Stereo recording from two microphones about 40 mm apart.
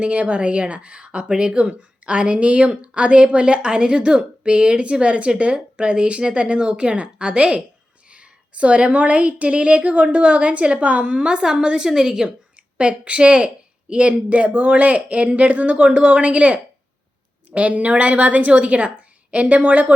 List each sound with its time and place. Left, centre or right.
0.0 s a woman's voice: right; by 12.3 s centre
12.7 s a woman's voice: right